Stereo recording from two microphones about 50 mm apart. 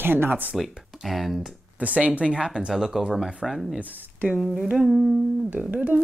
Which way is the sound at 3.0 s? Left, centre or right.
Centre.